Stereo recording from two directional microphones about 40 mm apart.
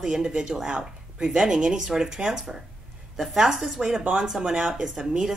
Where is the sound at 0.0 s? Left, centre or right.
Centre.